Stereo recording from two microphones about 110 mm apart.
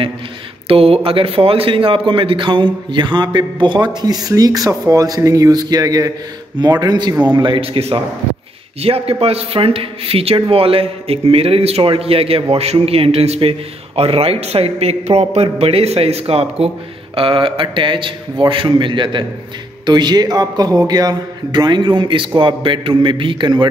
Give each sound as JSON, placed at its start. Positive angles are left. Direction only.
{"t": 0.7, "sound": "a man's voice", "side_deg": -60}